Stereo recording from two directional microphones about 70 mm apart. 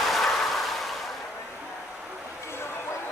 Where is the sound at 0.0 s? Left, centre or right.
Centre.